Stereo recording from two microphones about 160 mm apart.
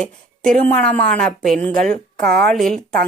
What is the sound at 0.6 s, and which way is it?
A woman's voice, 10° left (ahead or behind).